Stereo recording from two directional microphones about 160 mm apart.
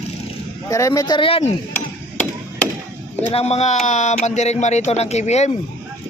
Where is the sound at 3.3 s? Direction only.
40° left (ahead or behind).